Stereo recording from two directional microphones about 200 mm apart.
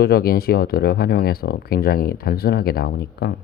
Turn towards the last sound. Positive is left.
turn(degrees=55)  # may be behind; listen again after turning